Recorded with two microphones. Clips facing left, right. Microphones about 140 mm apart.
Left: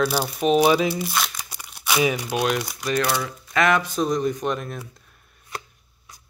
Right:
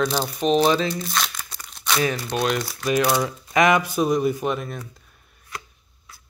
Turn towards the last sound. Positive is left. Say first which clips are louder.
# right 1 dB
turn(degrees=0)  # may be behind; listen again after turning